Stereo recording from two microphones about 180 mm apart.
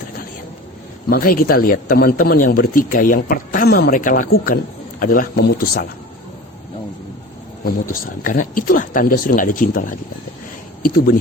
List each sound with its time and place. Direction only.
1.1 s speech: 55° left (ahead or behind)
7.6 s speech: 50° left (ahead or behind)